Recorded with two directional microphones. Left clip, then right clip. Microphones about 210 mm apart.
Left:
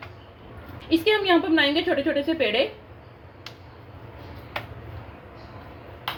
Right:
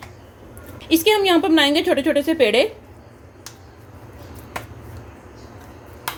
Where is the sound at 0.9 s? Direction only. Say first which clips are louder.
Right 4 dB; 40° right (ahead or behind).